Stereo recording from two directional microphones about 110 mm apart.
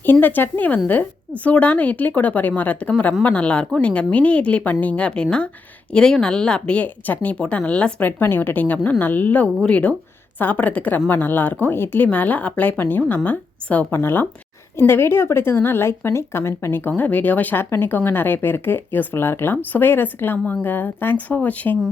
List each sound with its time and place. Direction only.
0.0 s speech: 20° left (ahead or behind)